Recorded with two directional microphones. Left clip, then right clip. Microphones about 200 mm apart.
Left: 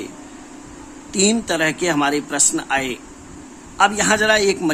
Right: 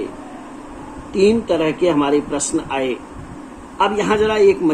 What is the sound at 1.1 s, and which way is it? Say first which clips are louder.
Speech: right 4 dB; 50° left (ahead or behind).